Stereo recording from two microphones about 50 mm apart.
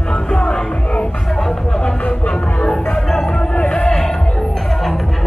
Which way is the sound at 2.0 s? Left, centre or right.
Left.